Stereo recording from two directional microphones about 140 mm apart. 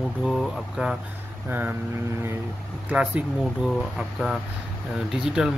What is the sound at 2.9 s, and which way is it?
Speech, 10° right (ahead or behind).